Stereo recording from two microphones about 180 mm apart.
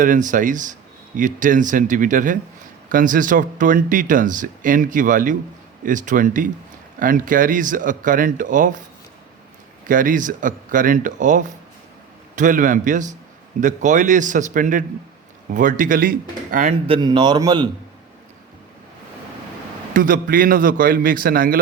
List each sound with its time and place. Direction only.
0.0 s speech: 45° right (ahead or behind)
9.8 s speech: 50° right (ahead or behind)
16.8 s a man's voice: 25° right (ahead or behind)
19.9 s speech: 50° right (ahead or behind)